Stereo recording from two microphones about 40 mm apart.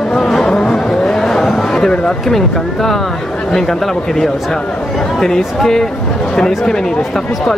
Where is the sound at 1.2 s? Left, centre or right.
Centre.